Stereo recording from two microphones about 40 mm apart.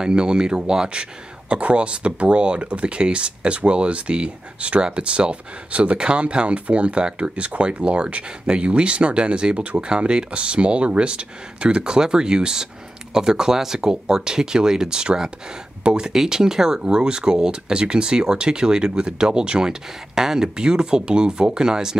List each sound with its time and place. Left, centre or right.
0.0 s speech: centre
16.1 s speech: centre